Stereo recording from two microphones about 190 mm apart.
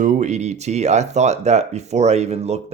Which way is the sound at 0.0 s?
40° right (ahead or behind).